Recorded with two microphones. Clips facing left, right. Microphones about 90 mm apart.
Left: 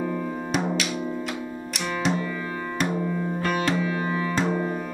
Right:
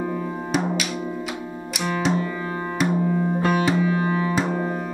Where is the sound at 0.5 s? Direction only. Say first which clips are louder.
Right 2 dB; 5° right (ahead or behind).